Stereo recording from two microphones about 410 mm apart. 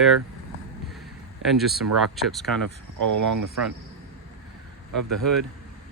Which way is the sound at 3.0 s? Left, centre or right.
Right.